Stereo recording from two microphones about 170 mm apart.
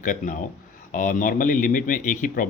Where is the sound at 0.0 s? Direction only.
50° left (ahead or behind).